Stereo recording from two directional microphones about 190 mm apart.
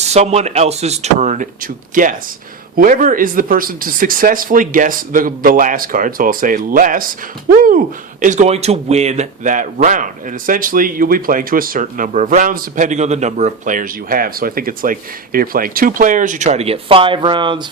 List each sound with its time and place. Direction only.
0.0 s a man's voice: 35° right (ahead or behind)
8.2 s a man's voice: 40° right (ahead or behind)